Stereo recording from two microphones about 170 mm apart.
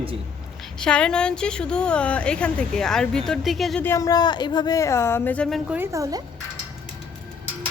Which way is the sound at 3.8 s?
15° left (ahead or behind).